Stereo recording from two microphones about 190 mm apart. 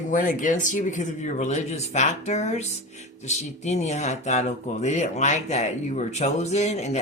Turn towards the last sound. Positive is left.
turn(degrees=35)  # may be behind; listen again after turning